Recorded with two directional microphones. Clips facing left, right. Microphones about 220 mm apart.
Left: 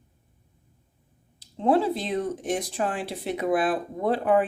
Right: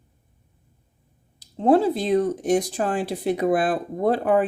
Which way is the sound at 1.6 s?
40° right (ahead or behind).